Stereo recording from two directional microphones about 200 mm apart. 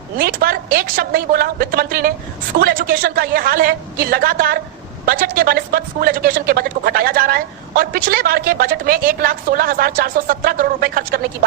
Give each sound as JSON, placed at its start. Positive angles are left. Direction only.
{"t": 0.2, "sound": "a woman's voice", "side_deg": -45}